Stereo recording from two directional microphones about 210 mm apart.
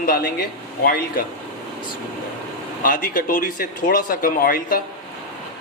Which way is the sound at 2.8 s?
40° left (ahead or behind).